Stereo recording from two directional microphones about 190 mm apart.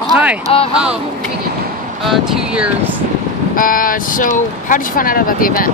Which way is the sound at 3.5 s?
45° left (ahead or behind).